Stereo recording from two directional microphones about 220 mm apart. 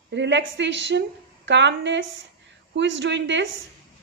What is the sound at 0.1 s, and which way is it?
A woman's voice, 55° right (ahead or behind).